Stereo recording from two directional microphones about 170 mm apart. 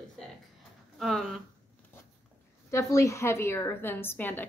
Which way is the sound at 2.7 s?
20° left (ahead or behind).